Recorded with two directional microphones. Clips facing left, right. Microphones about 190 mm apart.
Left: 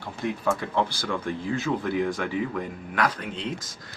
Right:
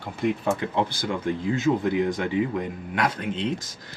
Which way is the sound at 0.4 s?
20° right (ahead or behind).